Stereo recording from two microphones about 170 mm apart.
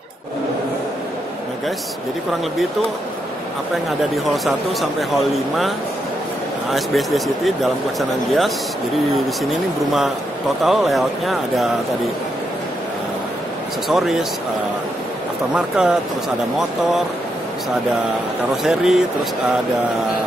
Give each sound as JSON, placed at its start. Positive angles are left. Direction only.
{"t": 4.3, "sound": "speech", "side_deg": 0}
{"t": 6.7, "sound": "speech", "side_deg": 0}
{"t": 13.8, "sound": "speech", "side_deg": 0}
{"t": 15.5, "sound": "speech", "side_deg": -5}
{"t": 18.6, "sound": "speech", "side_deg": 0}